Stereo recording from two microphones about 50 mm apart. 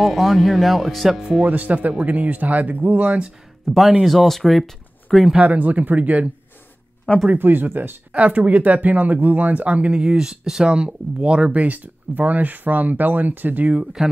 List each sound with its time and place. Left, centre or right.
0.0 s speech: centre
1.4 s speech: right
3.6 s speech: centre
5.4 s speech: right
7.3 s speech: right
8.1 s speech: right
10.0 s speech: centre; by 13.7 s right